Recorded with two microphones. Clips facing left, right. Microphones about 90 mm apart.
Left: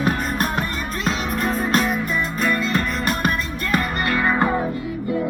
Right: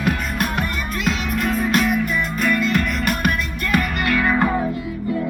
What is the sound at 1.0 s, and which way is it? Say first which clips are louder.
Music: even; 35° left (ahead or behind).